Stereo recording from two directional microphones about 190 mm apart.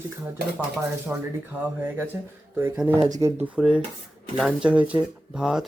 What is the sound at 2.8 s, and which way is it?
Speech, 5° right (ahead or behind).